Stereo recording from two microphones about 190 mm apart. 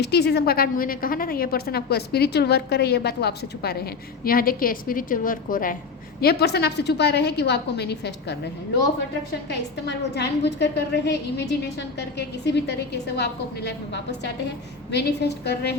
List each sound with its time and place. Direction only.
0.0 s a woman's voice: 60° left (ahead or behind)
6.1 s a woman's voice: 55° left (ahead or behind)
9.5 s a woman's voice: 65° left (ahead or behind)